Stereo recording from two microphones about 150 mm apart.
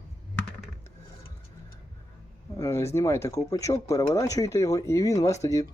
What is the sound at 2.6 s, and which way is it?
Speech, 20° left (ahead or behind).